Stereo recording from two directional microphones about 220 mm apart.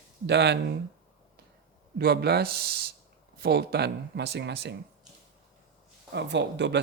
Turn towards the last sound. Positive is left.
turn(degrees=-50)  # may be behind; listen again after turning